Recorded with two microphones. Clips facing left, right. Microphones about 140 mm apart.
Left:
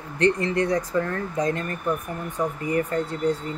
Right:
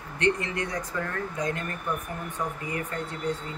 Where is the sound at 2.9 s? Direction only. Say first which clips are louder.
Left 8 dB; 35° left (ahead or behind).